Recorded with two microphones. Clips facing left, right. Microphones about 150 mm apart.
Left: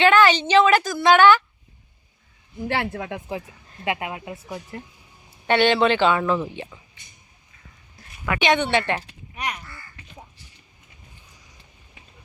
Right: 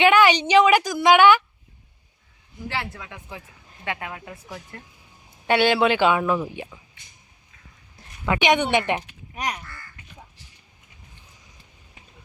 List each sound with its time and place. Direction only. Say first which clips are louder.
0.0 s a woman's voice: even; 15° right (ahead or behind)
2.6 s speech: left 5 dB; 55° left (ahead or behind)
3.1 s speech: left 9 dB; 25° left (ahead or behind)
5.5 s a woman's voice: left 1 dB; 10° right (ahead or behind)
8.2 s a woman's voice: right 1 dB; 15° right (ahead or behind)
9.3 s speech: right 1 dB; 35° right (ahead or behind)